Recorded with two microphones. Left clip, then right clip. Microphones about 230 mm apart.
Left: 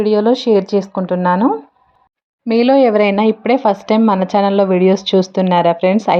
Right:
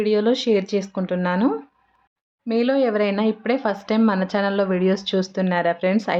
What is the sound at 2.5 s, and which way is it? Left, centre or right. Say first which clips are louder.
Speech: left 9 dB; left.